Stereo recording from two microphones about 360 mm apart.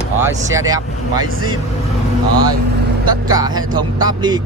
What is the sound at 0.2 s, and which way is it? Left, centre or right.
Speech, centre.